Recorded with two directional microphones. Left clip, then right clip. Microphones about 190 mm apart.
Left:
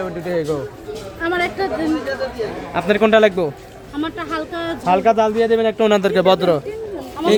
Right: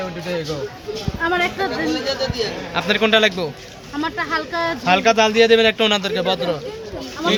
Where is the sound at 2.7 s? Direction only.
45° left (ahead or behind).